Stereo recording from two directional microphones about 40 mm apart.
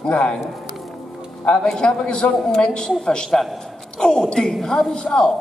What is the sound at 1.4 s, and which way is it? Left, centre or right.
A man's voice, left.